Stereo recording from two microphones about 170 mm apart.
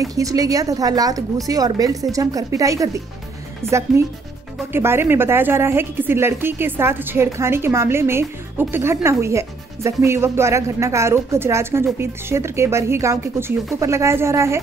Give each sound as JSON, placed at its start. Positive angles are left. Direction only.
{"t": 0.0, "sound": "a woman's voice", "side_deg": -20}